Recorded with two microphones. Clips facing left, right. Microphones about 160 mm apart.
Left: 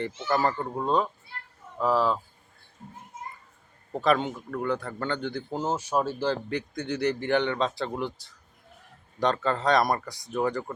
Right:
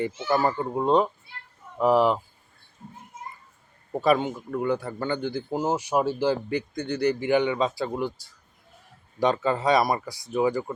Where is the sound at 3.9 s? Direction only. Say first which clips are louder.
Right 2 dB; 10° right (ahead or behind).